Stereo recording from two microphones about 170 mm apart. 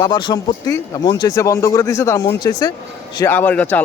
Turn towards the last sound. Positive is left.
turn(degrees=10)  # may be behind; listen again after turning